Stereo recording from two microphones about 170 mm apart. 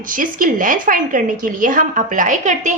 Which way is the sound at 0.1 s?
55° right (ahead or behind).